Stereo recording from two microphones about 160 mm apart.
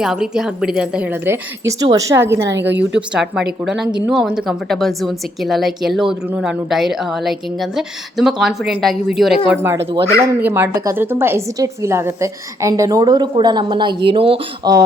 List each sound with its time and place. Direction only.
0.0 s a woman's voice: 5° right (ahead or behind)
2.6 s speech: 90° right
3.1 s a woman's voice: 5° right (ahead or behind)
9.5 s a woman's voice: 15° right (ahead or behind)